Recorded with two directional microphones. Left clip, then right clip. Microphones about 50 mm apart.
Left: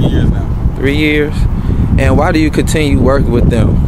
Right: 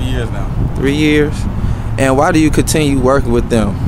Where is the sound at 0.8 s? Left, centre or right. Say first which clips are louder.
Even; right.